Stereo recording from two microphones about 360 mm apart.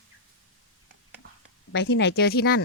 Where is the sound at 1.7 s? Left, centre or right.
Left.